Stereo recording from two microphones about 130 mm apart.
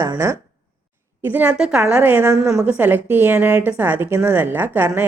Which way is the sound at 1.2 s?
15° right (ahead or behind).